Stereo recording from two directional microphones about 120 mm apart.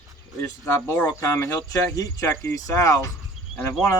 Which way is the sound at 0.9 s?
20° left (ahead or behind).